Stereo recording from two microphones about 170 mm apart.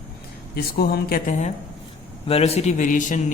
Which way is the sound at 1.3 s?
45° left (ahead or behind).